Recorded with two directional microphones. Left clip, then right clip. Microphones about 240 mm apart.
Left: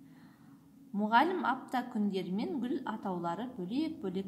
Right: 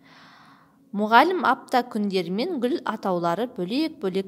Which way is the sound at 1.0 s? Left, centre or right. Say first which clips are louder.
Right 10 dB; right.